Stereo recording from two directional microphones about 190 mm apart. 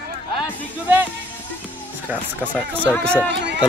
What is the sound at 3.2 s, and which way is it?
Speech, 65° right (ahead or behind).